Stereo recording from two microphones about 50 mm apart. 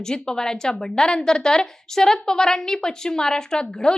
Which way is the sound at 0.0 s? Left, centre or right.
Centre.